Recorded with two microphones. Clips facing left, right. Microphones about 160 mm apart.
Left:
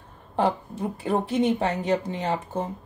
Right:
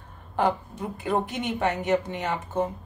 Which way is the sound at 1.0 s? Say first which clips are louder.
Left 4 dB; 30° left (ahead or behind).